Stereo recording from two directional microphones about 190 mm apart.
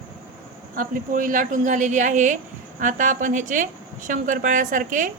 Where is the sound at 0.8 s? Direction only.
45° right (ahead or behind).